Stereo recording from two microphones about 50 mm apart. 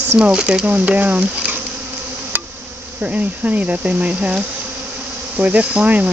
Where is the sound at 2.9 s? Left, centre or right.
Right.